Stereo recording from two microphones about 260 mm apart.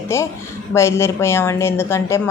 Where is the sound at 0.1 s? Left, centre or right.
Centre.